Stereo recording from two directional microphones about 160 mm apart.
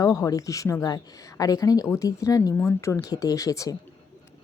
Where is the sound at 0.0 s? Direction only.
20° left (ahead or behind).